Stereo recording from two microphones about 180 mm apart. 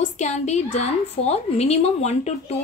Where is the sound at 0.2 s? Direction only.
40° left (ahead or behind).